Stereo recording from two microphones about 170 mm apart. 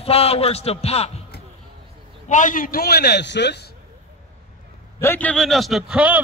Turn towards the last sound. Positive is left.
turn(degrees=-5)  # may be behind; listen again after turning